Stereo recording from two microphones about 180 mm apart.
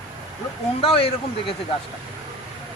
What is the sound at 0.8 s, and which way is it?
Speech, 30° left (ahead or behind).